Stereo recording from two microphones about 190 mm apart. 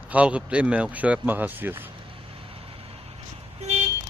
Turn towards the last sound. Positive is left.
turn(degrees=-35)  # may be behind; listen again after turning